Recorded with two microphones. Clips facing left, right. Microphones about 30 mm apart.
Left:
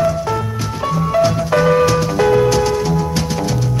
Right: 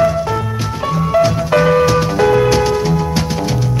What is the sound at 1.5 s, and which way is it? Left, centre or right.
Music, centre.